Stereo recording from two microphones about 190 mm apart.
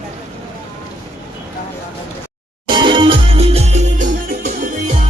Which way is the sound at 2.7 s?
25° right (ahead or behind).